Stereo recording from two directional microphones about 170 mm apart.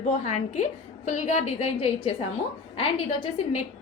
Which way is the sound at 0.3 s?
40° left (ahead or behind).